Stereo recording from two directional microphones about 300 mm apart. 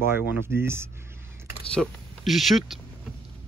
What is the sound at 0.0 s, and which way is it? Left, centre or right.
Speech, centre.